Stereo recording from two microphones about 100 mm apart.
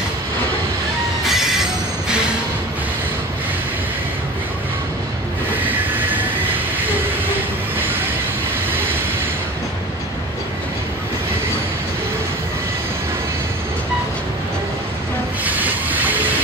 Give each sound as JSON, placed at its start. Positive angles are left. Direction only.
{"t": 1.2, "sound": "train wheels squealing", "side_deg": -5}
{"t": 15.4, "sound": "train", "side_deg": -15}